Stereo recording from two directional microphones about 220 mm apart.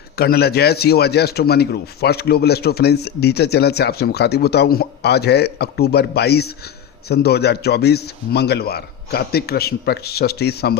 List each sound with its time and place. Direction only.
0.2 s a man's voice: 45° left (ahead or behind)